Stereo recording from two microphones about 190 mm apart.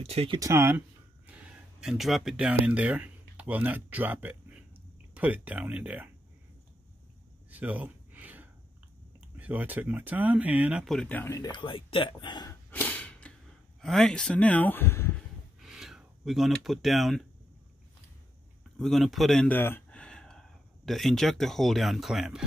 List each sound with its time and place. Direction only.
0.0 s speech: 30° right (ahead or behind)
0.4 s speech: 15° right (ahead or behind)
7.5 s gasp: 10° right (ahead or behind)
9.4 s speech: 10° right (ahead or behind); by 12.5 s 25° left (ahead or behind)
12.7 s a sound: 5° left (ahead or behind)
13.7 s speech: centre (ahead or behind)
15.6 s a sound: centre (ahead or behind)
18.8 s speech: centre (ahead or behind)